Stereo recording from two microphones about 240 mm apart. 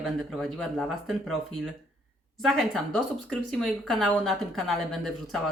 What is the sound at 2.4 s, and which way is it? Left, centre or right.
Speech, centre.